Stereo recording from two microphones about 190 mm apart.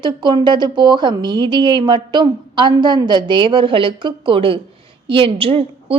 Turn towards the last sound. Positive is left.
turn(degrees=-30)  # may be behind; listen again after turning